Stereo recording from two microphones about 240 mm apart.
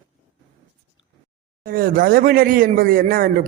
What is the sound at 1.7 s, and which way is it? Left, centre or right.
Speech, right.